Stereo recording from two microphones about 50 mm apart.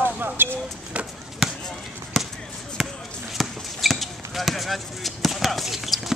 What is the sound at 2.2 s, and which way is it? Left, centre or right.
Basketball bounce, centre.